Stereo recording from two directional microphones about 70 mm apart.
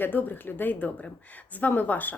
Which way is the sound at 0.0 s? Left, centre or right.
Left.